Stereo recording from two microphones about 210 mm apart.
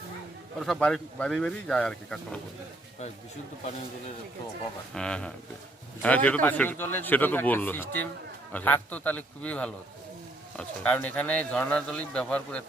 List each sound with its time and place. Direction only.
0.6 s speech: centre (ahead or behind)
4.9 s a man's voice: 5° left (ahead or behind)